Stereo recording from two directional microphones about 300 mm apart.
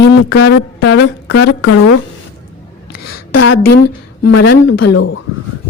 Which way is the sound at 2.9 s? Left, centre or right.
Left.